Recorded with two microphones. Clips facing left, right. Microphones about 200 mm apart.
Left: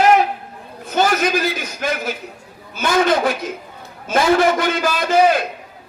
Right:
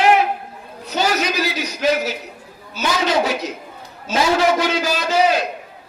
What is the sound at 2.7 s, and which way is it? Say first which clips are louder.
A woman's voice: left 3 dB; 50° left (ahead or behind).